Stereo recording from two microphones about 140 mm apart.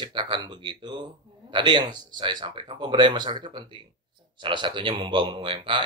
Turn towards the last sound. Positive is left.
turn(degrees=-35)  # may be behind; listen again after turning